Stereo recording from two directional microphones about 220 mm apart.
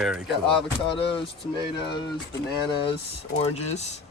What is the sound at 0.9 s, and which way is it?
Speech, 25° left (ahead or behind).